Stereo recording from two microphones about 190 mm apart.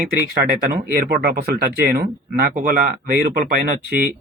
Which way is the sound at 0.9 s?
55° right (ahead or behind).